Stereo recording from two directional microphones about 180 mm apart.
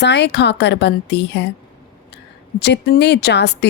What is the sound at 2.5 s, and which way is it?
A woman's voice, 70° left (ahead or behind).